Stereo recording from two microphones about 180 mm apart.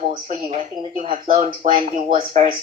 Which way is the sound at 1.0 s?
50° right (ahead or behind).